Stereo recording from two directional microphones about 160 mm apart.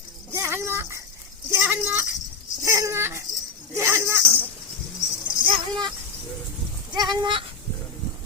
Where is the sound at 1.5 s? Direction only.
10° right (ahead or behind).